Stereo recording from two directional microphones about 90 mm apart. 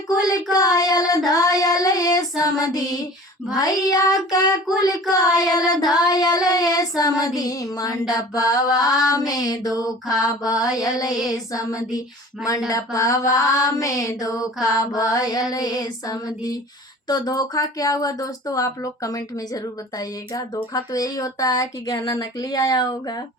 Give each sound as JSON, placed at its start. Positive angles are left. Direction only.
{"t": 0.2, "sound": "mantra", "side_deg": 40}
{"t": 0.5, "sound": "speech", "side_deg": 45}
{"t": 10.2, "sound": "mantra", "side_deg": 40}
{"t": 11.5, "sound": "speech", "side_deg": 40}
{"t": 12.5, "sound": "mantra", "side_deg": 40}
{"t": 15.5, "sound": "speech", "side_deg": 45}